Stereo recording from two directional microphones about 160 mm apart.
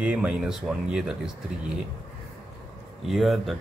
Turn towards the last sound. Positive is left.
turn(degrees=0)  # may be behind; listen again after turning